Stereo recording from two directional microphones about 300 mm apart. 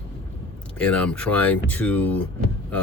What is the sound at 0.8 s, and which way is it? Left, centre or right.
Speech, centre.